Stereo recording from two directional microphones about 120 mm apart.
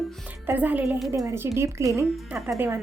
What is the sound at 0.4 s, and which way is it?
Speech, 15° right (ahead or behind).